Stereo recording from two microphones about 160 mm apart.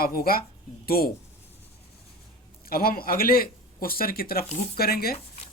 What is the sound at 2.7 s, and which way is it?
A man's voice, 65° left (ahead or behind).